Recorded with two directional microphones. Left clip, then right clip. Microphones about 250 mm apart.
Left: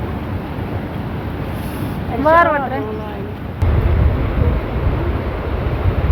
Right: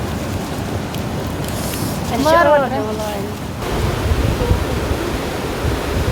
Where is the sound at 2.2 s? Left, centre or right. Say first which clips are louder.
Left 1 dB; centre.